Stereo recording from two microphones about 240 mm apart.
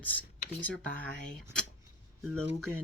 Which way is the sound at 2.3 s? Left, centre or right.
Right.